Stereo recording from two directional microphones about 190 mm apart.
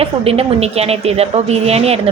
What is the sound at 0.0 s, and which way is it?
A woman's voice, 30° right (ahead or behind).